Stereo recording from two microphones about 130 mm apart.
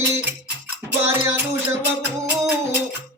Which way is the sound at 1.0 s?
20° right (ahead or behind).